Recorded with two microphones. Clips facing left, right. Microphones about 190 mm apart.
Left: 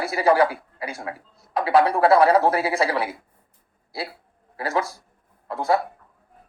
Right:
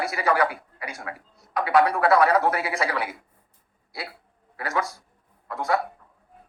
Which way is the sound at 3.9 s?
30° left (ahead or behind).